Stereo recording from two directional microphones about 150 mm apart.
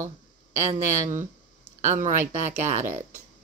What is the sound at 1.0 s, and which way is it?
Speech, 55° right (ahead or behind).